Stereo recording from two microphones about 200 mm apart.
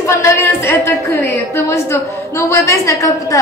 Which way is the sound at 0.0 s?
15° left (ahead or behind).